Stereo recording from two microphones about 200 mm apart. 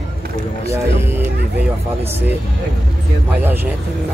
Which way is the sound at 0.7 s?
10° right (ahead or behind).